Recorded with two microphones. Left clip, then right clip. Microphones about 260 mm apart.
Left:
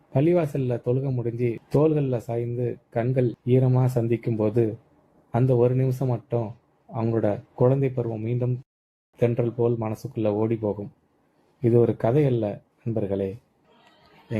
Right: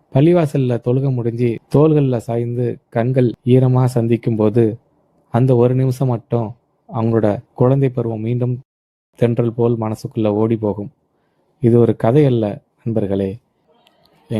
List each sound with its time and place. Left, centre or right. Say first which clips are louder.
0.1 s a man's voice: right 8 dB; right